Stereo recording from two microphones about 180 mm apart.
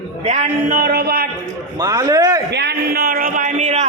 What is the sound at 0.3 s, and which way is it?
Speech, 40° right (ahead or behind).